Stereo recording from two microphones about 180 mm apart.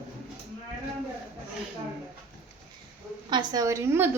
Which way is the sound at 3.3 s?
25° right (ahead or behind).